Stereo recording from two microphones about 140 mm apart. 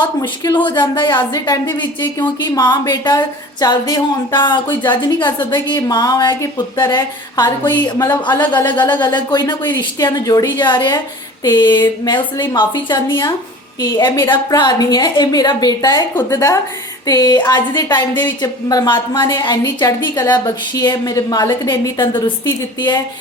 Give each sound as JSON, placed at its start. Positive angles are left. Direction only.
{"t": 0.2, "sound": "a woman's voice", "side_deg": 30}